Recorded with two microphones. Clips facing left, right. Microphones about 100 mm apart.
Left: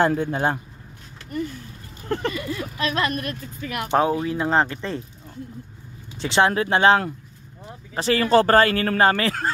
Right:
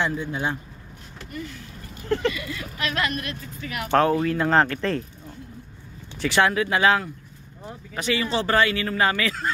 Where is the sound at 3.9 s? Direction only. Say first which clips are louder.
Right 1 dB; 15° left (ahead or behind).